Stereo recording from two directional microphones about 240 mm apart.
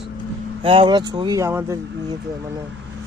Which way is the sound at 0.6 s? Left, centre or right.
Right.